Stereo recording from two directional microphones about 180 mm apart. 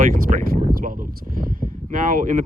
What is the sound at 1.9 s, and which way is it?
Speech, 50° right (ahead or behind).